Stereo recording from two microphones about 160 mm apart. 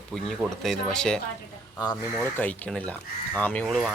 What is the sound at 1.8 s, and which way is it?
Speech, 25° left (ahead or behind).